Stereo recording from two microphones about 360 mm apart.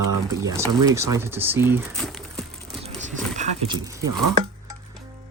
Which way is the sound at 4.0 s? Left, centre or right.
Right.